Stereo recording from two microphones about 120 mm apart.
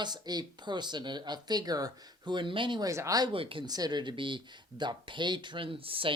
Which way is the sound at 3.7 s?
35° right (ahead or behind).